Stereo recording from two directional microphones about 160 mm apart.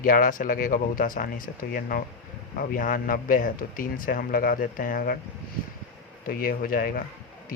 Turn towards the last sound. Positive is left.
turn(degrees=65)  # may be behind; listen again after turning